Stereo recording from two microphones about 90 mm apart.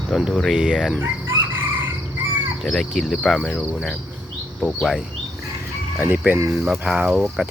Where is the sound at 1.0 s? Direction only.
20° right (ahead or behind).